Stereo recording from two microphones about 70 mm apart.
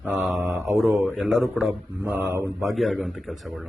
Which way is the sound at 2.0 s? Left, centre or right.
Right.